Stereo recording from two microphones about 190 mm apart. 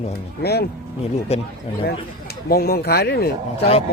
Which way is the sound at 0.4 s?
60° left (ahead or behind).